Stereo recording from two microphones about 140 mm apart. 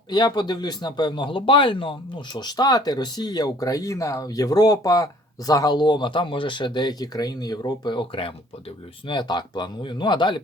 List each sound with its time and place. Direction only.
0.1 s speech: 30° left (ahead or behind)